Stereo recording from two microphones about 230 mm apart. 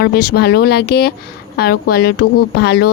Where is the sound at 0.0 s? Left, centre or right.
Left.